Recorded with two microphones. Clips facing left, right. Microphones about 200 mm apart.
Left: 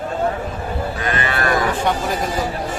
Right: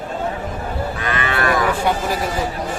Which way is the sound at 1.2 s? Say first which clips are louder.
Right 3 dB; 40° left (ahead or behind).